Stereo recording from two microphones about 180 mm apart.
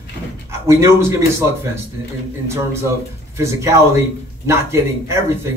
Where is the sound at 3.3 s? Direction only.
15° right (ahead or behind).